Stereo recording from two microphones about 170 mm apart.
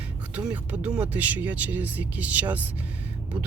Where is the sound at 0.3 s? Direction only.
10° right (ahead or behind).